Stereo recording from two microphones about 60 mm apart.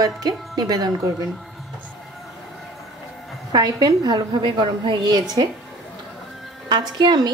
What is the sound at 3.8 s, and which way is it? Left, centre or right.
Speech, right.